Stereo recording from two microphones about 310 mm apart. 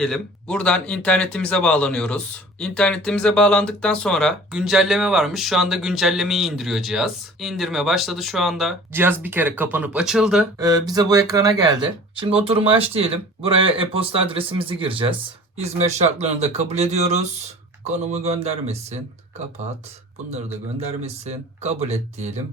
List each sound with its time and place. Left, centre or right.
0.0 s speech: centre; by 18.9 s right
20.3 s speech: right